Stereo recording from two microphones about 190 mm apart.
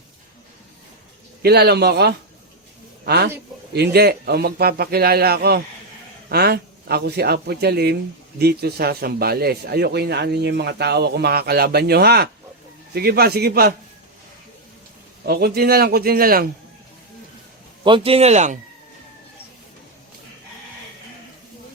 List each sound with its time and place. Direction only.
1.4 s a man's voice: 55° right (ahead or behind)
15.3 s a man's voice: 55° right (ahead or behind)
17.8 s speech: 30° right (ahead or behind)